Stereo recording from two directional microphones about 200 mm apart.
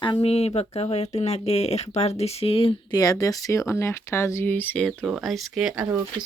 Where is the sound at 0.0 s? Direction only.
25° left (ahead or behind).